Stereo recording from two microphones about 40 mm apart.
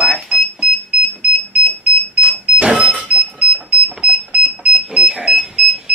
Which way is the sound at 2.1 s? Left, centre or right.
Right.